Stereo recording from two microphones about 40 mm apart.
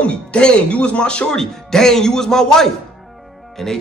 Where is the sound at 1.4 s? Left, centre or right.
Centre.